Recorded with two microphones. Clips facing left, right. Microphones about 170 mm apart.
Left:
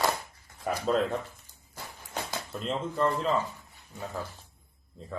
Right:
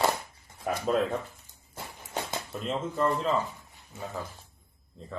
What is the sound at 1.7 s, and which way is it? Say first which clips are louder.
Walk: right 2 dB; 20° right (ahead or behind).